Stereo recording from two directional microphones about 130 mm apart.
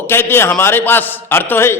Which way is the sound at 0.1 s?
15° left (ahead or behind).